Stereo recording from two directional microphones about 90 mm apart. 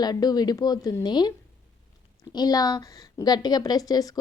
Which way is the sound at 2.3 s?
45° left (ahead or behind).